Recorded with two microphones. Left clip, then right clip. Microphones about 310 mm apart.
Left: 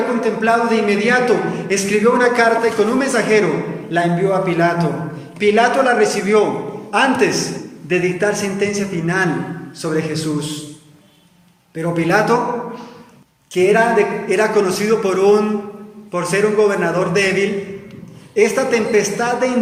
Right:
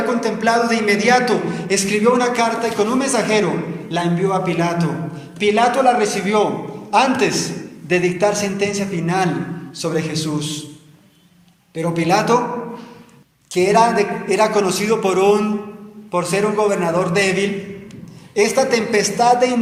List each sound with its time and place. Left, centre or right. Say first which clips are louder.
0.2 s a man's voice: left 3 dB; centre
11.7 s a man's voice: left 1 dB; centre
13.5 s a man's voice: left 1 dB; centre